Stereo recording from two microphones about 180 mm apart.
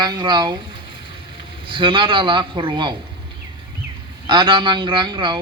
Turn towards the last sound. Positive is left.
turn(degrees=-25)  # may be behind; listen again after turning